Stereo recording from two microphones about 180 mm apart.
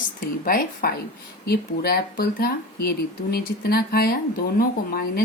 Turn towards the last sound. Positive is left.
turn(degrees=55)  # may be behind; listen again after turning